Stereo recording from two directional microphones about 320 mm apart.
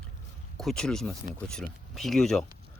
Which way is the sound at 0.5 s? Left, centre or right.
Centre.